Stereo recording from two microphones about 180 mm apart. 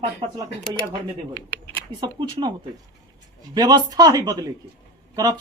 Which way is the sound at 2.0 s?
25° right (ahead or behind).